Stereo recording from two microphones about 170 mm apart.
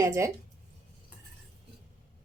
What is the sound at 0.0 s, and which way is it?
Speech, 20° right (ahead or behind).